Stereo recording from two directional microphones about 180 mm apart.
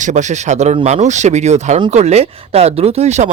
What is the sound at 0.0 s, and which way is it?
Speech, 40° right (ahead or behind).